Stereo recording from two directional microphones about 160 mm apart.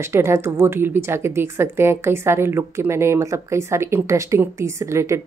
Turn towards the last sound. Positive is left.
turn(degrees=-20)  # may be behind; listen again after turning